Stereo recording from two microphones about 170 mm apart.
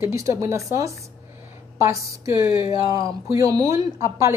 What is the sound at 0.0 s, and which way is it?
A woman's voice, 15° right (ahead or behind).